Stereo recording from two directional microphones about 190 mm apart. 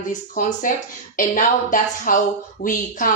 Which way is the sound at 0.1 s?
45° left (ahead or behind).